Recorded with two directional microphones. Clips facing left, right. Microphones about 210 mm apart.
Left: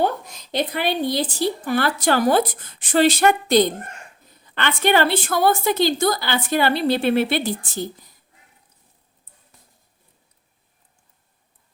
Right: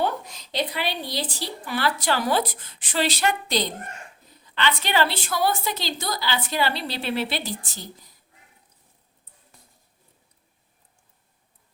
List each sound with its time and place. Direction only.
0.5 s a woman's voice: 50° left (ahead or behind)